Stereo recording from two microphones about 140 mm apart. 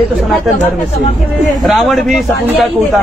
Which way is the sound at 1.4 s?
Centre (ahead or behind).